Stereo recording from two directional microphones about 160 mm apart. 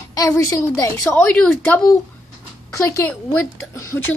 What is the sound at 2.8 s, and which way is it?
Speech, 15° left (ahead or behind).